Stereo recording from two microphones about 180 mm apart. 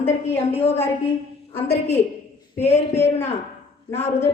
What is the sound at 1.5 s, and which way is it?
A woman's voice, 10° left (ahead or behind).